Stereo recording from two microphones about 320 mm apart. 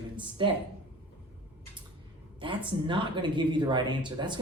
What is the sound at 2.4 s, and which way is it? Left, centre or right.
Speech, centre.